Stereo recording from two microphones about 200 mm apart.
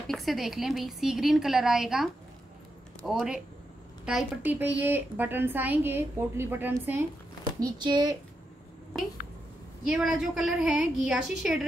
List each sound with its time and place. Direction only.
0.1 s a woman's voice: centre (ahead or behind); by 8.2 s 20° right (ahead or behind)
9.8 s a woman's voice: 5° right (ahead or behind)